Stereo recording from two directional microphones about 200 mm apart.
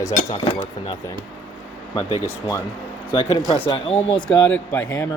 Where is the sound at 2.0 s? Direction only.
25° left (ahead or behind).